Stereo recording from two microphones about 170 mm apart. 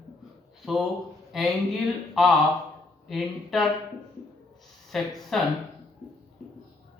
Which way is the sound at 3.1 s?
Centre (ahead or behind).